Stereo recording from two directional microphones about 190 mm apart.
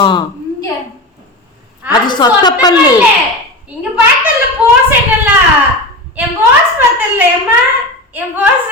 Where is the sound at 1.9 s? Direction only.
25° left (ahead or behind).